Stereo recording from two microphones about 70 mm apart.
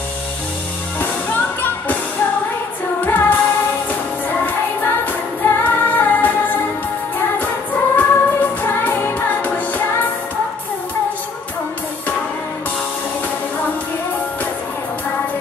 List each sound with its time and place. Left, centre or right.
0.9 s music: left
3.1 s music: left
7.9 s music: left